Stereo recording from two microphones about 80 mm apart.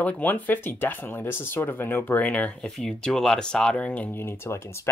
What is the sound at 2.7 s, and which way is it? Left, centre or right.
Speech, centre.